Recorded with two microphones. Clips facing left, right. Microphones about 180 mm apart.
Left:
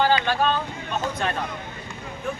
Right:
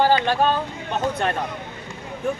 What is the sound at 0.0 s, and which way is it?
Vehicle, 40° right (ahead or behind).